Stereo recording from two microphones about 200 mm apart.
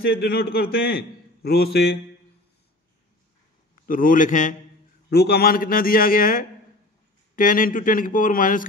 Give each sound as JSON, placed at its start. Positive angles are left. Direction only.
{"t": 0.0, "sound": "a man's voice", "side_deg": 50}
{"t": 3.8, "sound": "a man's voice", "side_deg": 45}
{"t": 5.1, "sound": "a man's voice", "side_deg": 55}